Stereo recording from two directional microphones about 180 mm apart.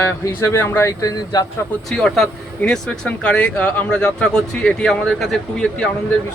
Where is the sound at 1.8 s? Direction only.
5° left (ahead or behind).